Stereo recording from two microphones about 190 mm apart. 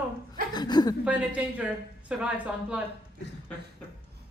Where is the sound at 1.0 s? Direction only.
5° right (ahead or behind).